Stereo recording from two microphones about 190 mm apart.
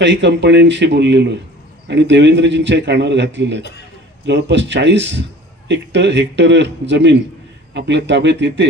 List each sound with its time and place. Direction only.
0.0 s a man's voice: 70° right (ahead or behind)